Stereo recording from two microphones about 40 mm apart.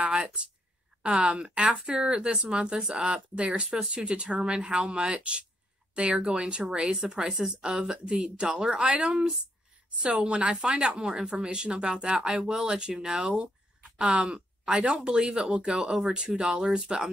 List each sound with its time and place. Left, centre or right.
0.0 s a woman's voice: right